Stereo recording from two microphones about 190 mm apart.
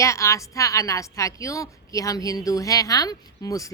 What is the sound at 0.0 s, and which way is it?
A woman's voice, 15° left (ahead or behind).